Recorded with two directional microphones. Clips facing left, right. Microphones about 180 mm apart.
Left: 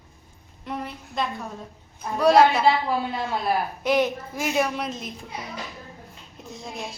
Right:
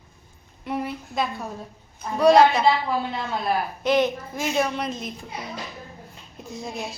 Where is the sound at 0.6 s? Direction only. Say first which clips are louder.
Right 4 dB; 5° right (ahead or behind).